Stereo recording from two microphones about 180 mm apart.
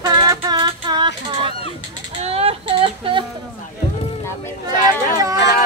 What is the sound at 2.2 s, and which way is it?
Child singing, 35° right (ahead or behind).